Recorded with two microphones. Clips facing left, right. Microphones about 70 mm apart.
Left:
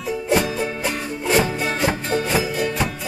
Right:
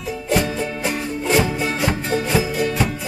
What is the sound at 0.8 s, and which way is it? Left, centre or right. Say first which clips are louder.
Music: right 2 dB; centre.